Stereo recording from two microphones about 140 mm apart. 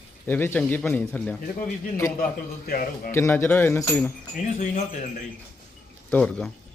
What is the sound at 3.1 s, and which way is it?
A man's voice, 20° left (ahead or behind).